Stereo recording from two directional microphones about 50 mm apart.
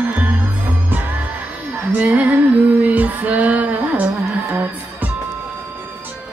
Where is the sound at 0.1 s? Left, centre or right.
Right.